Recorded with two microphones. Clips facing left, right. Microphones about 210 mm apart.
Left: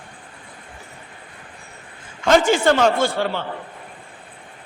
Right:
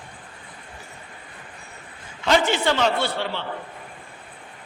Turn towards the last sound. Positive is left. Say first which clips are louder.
# left 5 dB
turn(degrees=45)  # may be behind; listen again after turning